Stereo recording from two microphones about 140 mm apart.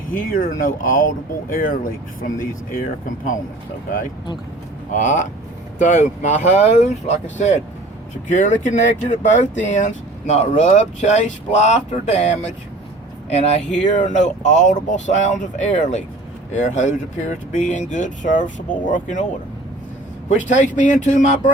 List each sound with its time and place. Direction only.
0.1 s speech: 80° left
4.9 s speech: 65° left (ahead or behind)
13.8 s speech: 60° left (ahead or behind)
20.3 s speech: 60° left (ahead or behind)